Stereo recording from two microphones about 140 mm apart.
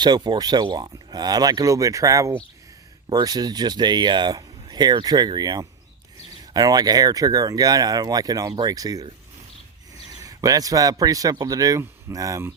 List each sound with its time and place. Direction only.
0.0 s speech: 30° right (ahead or behind)
10.1 s a man's voice: 25° right (ahead or behind)